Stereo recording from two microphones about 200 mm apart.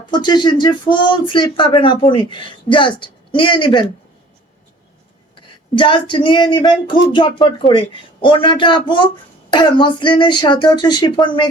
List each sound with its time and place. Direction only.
0.0 s speech: 20° left (ahead or behind)
5.7 s speech: 25° left (ahead or behind)